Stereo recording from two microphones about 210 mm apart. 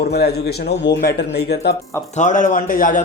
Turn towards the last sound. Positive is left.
turn(degrees=40)  # may be behind; listen again after turning